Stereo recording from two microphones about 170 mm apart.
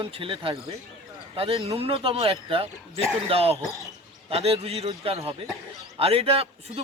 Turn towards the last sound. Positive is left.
turn(degrees=-35)  # may be behind; listen again after turning